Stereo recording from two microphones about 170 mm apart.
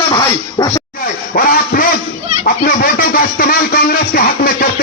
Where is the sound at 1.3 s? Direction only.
55° left (ahead or behind).